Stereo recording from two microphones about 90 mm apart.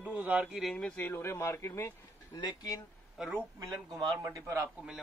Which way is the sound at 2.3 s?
45° left (ahead or behind).